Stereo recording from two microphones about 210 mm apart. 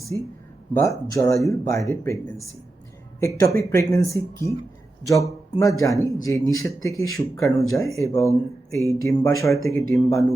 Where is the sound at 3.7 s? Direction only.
15° left (ahead or behind).